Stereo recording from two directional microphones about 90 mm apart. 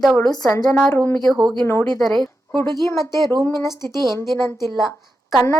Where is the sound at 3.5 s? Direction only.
35° left (ahead or behind).